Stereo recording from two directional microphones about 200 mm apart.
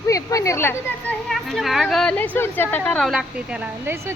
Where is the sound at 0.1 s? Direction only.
15° left (ahead or behind).